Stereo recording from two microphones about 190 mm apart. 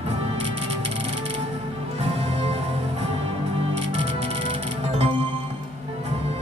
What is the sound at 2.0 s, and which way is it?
Music, 35° right (ahead or behind).